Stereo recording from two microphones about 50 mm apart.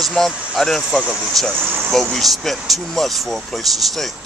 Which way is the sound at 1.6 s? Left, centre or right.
Right.